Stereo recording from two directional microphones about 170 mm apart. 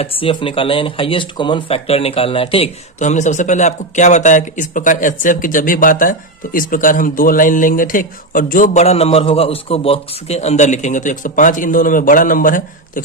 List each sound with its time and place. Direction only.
0.0 s speech: 30° left (ahead or behind); by 13.0 s 55° left (ahead or behind)